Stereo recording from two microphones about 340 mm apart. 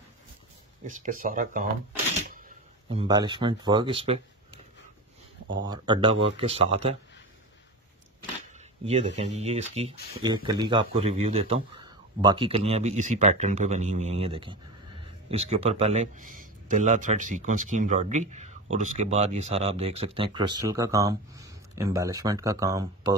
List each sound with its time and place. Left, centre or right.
0.8 s speech: right
2.9 s speech: centre
5.7 s speech: centre
8.5 s speech: centre